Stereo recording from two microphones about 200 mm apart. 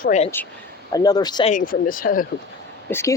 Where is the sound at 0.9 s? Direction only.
20° left (ahead or behind).